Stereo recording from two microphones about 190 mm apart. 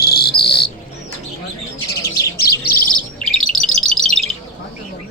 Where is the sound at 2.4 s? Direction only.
55° left (ahead or behind).